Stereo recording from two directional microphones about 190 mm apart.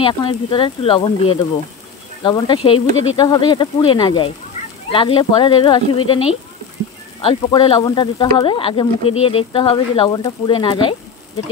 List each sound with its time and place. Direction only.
0.0 s speech: 25° left (ahead or behind)